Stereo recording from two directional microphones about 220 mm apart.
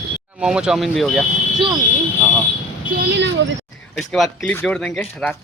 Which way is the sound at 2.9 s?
50° right (ahead or behind).